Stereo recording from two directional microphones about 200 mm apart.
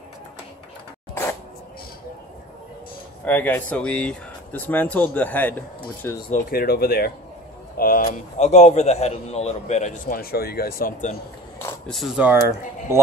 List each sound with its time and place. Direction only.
3.3 s speech: 10° left (ahead or behind)
6.3 s a man's voice: 50° left (ahead or behind)
11.9 s speech: centre (ahead or behind)